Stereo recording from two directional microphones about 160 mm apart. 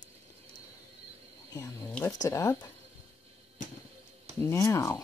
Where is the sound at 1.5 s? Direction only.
20° left (ahead or behind).